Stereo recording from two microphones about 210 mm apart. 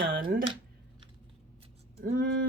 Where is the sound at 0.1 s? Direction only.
40° right (ahead or behind).